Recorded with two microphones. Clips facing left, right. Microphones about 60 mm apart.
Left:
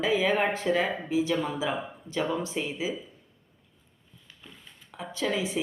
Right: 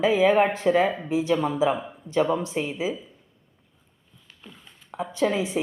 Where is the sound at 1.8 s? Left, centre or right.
Centre.